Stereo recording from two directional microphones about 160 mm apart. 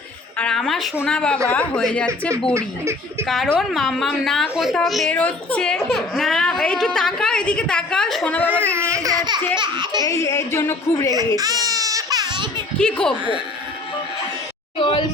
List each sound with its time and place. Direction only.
0.3 s speech: 5° left (ahead or behind)
2.6 s speech: 15° right (ahead or behind)
3.2 s speech: centre (ahead or behind)
8.6 s a sound: 15° right (ahead or behind)
10.0 s a woman's voice: 20° left (ahead or behind)
11.3 s baby cry: 25° right (ahead or behind)
12.8 s speech: 5° left (ahead or behind)
14.8 s speech: 30° left (ahead or behind)